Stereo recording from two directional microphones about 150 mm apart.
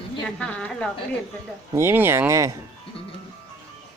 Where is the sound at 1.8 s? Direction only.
15° right (ahead or behind).